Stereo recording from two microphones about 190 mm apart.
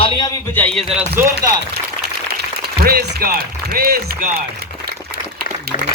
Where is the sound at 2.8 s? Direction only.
55° right (ahead or behind).